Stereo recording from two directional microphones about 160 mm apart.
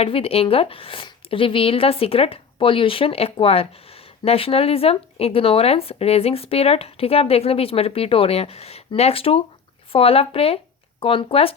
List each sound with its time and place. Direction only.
0.0 s speech: 35° left (ahead or behind)